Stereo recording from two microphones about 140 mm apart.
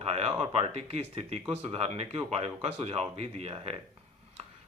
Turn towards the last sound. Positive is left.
turn(degrees=-45)  # may be behind; listen again after turning